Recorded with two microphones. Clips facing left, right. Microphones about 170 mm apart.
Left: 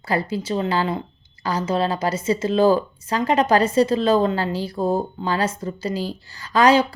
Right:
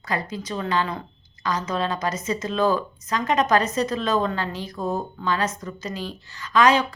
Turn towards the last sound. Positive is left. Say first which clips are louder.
# left 3 dB
turn(degrees=35)  # may be behind; listen again after turning